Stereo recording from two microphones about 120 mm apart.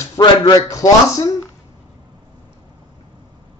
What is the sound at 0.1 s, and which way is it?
Speech, 35° left (ahead or behind).